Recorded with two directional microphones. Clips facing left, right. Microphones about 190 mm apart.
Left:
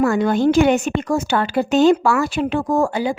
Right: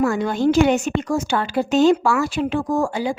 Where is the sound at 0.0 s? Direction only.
60° left (ahead or behind).